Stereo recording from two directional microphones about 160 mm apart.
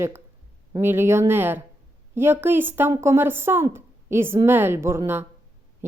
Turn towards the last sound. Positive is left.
turn(degrees=-15)  # may be behind; listen again after turning